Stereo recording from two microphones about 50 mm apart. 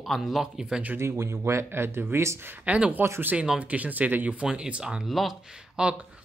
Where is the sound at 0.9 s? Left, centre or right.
Right.